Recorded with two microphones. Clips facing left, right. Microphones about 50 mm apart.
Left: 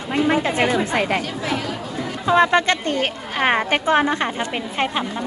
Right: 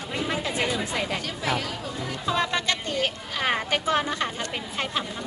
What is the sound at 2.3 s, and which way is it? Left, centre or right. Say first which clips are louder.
A woman's voice: left 10 dB; left.